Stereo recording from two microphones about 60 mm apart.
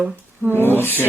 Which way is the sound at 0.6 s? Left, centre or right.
Left.